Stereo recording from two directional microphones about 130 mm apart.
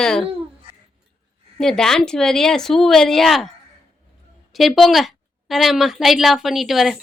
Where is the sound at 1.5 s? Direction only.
5° left (ahead or behind).